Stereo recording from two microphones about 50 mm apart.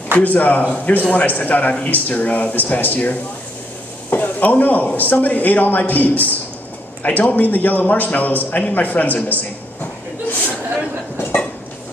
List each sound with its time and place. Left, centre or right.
0.2 s a man's voice: left